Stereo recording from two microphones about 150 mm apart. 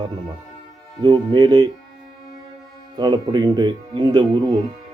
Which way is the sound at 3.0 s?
30° right (ahead or behind).